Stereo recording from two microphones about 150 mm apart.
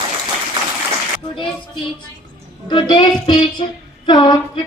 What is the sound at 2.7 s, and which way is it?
A woman's voice, 30° left (ahead or behind).